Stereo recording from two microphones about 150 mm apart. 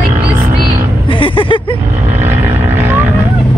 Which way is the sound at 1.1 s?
35° left (ahead or behind).